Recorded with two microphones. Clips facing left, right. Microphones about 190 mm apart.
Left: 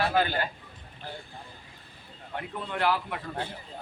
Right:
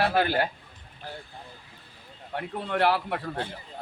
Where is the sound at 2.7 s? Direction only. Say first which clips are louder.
Right 4 dB; 65° right (ahead or behind).